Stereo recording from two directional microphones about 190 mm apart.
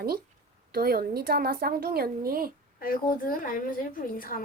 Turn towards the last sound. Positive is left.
turn(degrees=50)  # may be behind; listen again after turning